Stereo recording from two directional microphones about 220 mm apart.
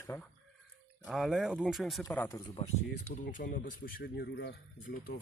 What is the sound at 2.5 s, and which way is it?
Speech, 25° left (ahead or behind).